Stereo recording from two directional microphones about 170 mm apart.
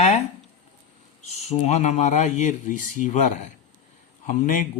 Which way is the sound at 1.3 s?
40° left (ahead or behind).